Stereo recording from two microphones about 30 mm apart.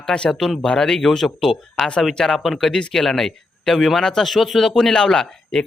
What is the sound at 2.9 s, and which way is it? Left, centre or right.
Speech, centre.